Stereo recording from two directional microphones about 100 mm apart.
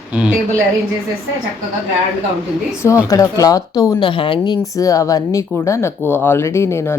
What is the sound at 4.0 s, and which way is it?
Speech, 55° left (ahead or behind).